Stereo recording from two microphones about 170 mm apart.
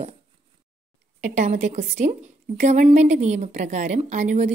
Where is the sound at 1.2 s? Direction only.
45° right (ahead or behind).